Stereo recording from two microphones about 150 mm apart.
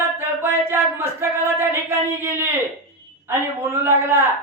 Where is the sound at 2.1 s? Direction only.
15° right (ahead or behind).